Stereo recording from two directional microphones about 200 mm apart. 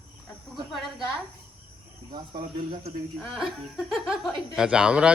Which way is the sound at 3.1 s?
Centre (ahead or behind).